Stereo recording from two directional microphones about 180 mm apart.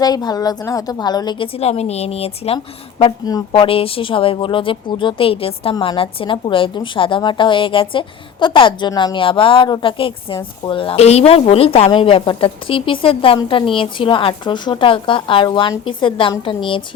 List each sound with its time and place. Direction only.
0.0 s a woman's voice: 20° left (ahead or behind)
3.0 s a woman's voice: 20° left (ahead or behind)
3.5 s a woman's voice: 30° left (ahead or behind)